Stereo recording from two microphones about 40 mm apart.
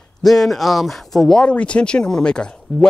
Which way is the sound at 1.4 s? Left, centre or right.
Left.